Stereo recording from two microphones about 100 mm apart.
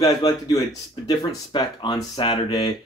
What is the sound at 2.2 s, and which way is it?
Speech, 65° left (ahead or behind).